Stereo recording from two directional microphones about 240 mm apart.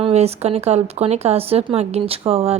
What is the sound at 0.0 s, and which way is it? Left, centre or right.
Speech, right.